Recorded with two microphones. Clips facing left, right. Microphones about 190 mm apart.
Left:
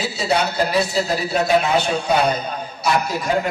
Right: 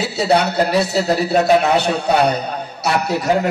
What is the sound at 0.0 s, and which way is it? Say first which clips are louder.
A man's voice: right 4 dB; 65° right (ahead or behind).